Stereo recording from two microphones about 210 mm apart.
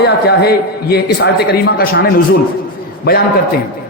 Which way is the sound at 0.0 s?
50° left (ahead or behind).